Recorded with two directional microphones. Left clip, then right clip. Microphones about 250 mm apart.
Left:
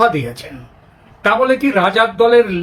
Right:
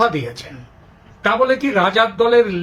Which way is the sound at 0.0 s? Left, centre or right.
Centre.